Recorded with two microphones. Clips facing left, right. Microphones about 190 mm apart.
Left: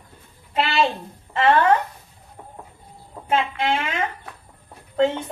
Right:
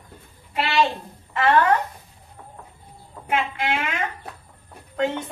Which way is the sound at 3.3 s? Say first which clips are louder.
Left 3 dB; 30° left (ahead or behind).